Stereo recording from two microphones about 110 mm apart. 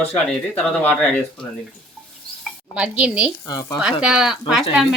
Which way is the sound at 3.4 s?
35° left (ahead or behind).